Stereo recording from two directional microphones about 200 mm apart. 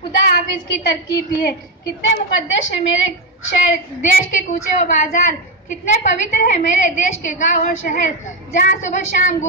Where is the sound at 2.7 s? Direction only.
65° left (ahead or behind).